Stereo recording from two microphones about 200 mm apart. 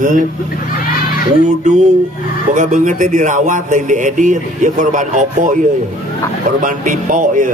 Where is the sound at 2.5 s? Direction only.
40° right (ahead or behind).